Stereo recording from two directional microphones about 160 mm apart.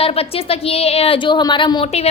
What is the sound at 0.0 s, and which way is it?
A woman's voice, 35° left (ahead or behind).